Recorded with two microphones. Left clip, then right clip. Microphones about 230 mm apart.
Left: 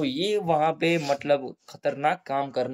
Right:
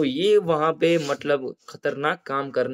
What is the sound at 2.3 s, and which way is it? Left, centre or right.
Speech, centre.